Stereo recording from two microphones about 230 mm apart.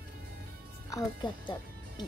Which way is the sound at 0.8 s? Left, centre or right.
Centre.